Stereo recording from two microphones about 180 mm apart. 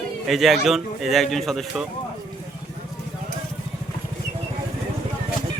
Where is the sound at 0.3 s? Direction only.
Centre (ahead or behind).